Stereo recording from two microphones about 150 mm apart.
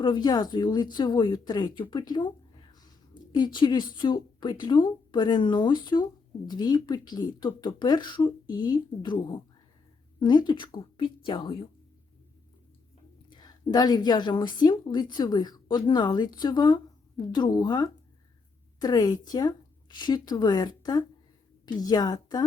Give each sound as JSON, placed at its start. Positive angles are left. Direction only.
{"t": 0.0, "sound": "speech", "side_deg": 30}
{"t": 3.3, "sound": "a woman's voice", "side_deg": 30}
{"t": 13.3, "sound": "a woman's voice", "side_deg": 25}